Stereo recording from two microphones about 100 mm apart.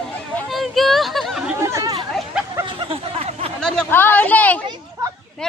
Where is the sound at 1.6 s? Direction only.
30° right (ahead or behind).